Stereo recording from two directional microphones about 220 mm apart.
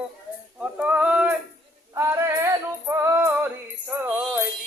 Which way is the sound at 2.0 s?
10° right (ahead or behind).